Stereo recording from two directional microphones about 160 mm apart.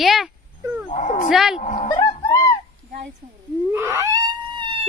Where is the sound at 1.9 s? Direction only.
25° left (ahead or behind).